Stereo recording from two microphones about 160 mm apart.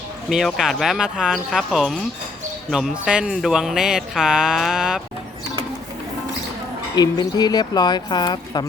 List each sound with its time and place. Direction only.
0.3 s speech: centre (ahead or behind)
6.9 s speech: 25° left (ahead or behind)